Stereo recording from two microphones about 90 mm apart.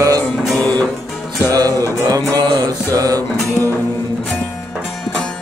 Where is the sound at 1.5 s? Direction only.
40° right (ahead or behind).